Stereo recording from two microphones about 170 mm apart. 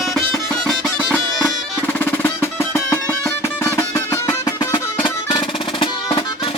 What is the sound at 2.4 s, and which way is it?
Music, 15° left (ahead or behind).